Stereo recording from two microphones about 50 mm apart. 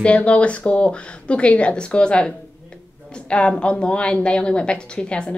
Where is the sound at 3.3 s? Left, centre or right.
Left.